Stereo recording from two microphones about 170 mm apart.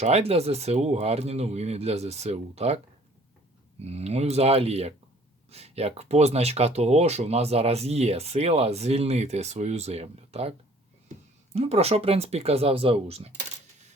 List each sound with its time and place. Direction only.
0.0 s speech: 40° right (ahead or behind)
11.5 s speech: 40° right (ahead or behind)